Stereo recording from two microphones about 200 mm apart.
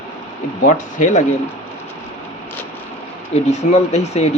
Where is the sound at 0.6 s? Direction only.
40° left (ahead or behind).